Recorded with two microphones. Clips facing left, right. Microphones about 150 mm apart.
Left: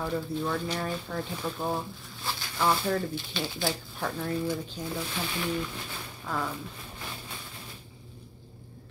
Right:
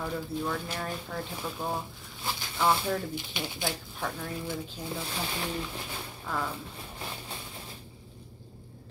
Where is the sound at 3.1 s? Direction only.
15° right (ahead or behind).